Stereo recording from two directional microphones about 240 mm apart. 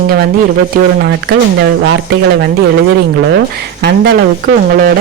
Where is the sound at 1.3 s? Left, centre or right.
Right.